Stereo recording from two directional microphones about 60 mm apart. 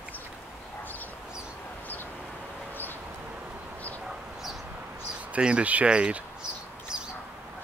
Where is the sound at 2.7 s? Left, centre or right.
Left.